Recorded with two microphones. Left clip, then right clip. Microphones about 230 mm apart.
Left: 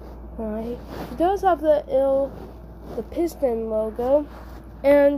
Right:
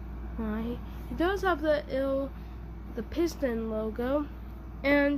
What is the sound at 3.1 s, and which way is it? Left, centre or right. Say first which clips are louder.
Speech: left 6 dB; centre.